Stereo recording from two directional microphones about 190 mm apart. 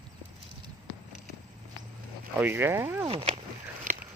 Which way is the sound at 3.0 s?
30° right (ahead or behind).